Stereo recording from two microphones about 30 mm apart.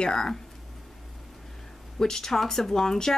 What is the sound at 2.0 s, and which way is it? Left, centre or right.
Speech, centre.